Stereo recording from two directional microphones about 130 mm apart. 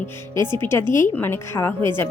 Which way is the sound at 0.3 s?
35° right (ahead or behind).